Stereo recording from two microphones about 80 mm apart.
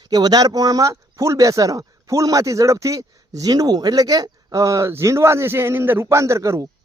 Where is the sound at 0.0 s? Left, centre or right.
Right.